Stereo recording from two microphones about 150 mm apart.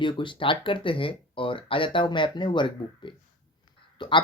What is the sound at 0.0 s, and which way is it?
Speech, 35° left (ahead or behind).